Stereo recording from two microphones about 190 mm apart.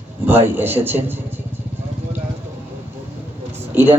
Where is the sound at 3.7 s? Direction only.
10° right (ahead or behind).